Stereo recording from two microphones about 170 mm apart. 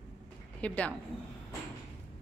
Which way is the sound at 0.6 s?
5° left (ahead or behind).